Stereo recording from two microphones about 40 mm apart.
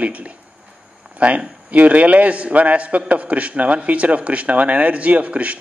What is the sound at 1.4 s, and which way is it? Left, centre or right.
A man's voice, right.